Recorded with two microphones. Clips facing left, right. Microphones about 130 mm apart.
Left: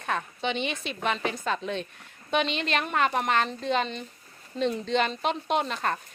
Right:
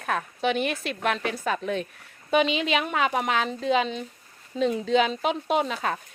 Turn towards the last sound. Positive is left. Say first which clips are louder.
# right 2 dB
turn(degrees=-5)  # may be behind; listen again after turning